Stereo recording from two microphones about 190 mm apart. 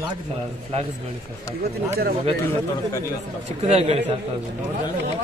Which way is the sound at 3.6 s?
30° right (ahead or behind).